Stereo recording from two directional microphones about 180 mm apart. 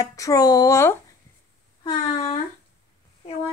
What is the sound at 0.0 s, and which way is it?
Speech, 20° left (ahead or behind).